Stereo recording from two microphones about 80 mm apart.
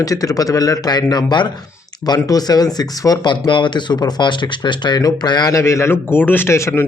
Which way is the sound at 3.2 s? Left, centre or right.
Left.